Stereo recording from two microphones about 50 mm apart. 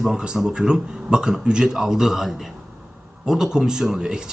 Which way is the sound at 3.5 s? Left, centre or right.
Centre.